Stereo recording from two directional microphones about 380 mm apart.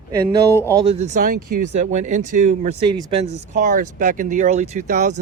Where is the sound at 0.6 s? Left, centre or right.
Centre.